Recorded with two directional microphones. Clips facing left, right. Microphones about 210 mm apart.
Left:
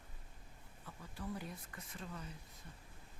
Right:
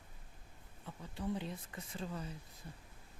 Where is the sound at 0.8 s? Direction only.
25° right (ahead or behind).